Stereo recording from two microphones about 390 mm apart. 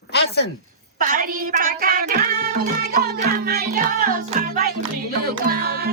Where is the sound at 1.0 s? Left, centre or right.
Right.